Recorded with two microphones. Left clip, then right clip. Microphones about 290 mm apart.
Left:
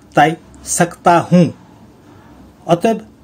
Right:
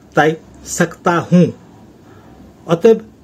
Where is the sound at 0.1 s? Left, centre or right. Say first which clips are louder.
Left 1 dB; left.